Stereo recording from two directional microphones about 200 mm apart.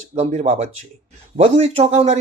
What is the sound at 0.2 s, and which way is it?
Speech, 35° right (ahead or behind).